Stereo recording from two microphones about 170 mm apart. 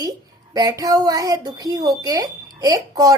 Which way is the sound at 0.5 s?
20° right (ahead or behind).